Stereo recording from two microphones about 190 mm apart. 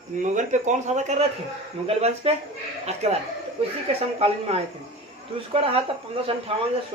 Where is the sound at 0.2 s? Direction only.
40° right (ahead or behind).